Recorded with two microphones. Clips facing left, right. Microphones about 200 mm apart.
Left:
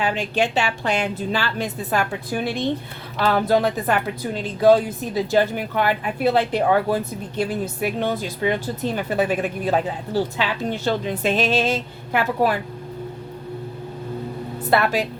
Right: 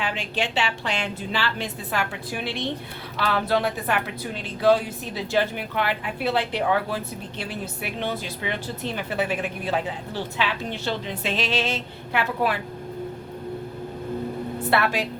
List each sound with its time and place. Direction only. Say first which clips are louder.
0.0 s a woman's voice: left 6 dB; 45° left (ahead or behind)
14.7 s a woman's voice: left 4 dB; 40° left (ahead or behind)